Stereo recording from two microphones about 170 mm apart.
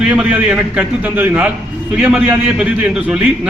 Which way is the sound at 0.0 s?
5° right (ahead or behind).